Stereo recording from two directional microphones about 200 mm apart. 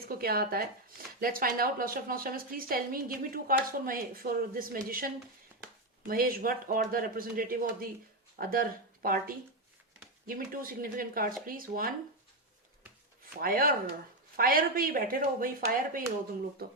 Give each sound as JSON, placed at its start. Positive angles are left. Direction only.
{"t": 0.1, "sound": "speech", "side_deg": -50}
{"t": 13.4, "sound": "speech", "side_deg": -45}